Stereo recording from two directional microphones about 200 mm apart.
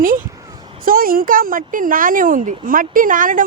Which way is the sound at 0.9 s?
45° right (ahead or behind).